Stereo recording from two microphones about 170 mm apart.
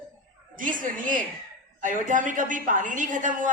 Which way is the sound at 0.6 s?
50° right (ahead or behind).